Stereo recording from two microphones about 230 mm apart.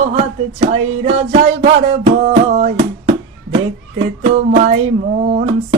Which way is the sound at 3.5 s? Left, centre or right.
Right.